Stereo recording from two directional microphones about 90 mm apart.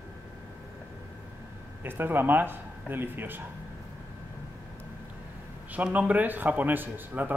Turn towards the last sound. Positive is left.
turn(degrees=-20)  # may be behind; listen again after turning